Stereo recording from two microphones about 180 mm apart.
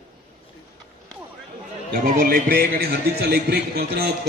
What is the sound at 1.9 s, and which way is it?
Speech, 55° right (ahead or behind).